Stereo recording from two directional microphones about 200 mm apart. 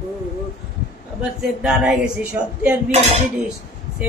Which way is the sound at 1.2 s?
5° right (ahead or behind).